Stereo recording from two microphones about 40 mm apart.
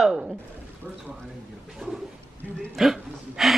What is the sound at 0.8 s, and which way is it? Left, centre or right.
Speech, right.